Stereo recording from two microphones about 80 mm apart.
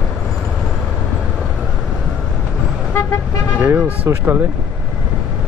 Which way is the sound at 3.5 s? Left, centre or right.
Right.